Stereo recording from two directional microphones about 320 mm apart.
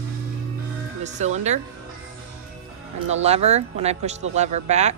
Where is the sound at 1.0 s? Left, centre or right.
Right.